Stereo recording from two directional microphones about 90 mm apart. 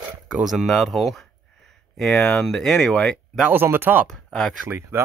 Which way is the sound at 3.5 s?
25° right (ahead or behind).